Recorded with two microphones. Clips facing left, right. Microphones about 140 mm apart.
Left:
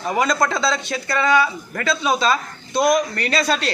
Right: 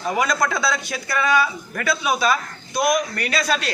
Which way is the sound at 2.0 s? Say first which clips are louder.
Left 2 dB; 25° left (ahead or behind).